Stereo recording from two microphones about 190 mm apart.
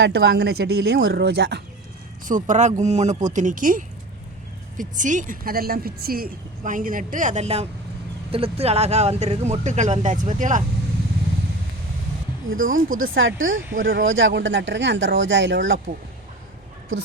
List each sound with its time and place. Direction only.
0.0 s speech: 60° right (ahead or behind)
2.2 s a woman's voice: 40° right (ahead or behind)
12.5 s speech: 90° right